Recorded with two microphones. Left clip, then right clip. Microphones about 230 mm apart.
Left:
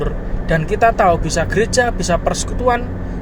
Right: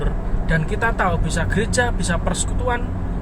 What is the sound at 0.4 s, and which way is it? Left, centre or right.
Speech, left.